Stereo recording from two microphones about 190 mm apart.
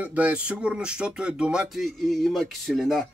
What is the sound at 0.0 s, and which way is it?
Speech, 10° right (ahead or behind).